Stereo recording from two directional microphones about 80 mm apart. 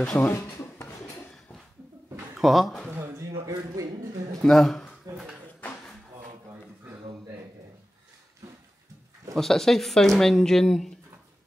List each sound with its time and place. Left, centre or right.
0.2 s speech: left
2.3 s speech: centre
3.2 s a sound: right
4.4 s speech: centre
9.3 s speech: centre